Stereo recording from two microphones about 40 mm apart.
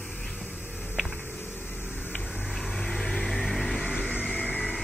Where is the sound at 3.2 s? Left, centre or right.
Centre.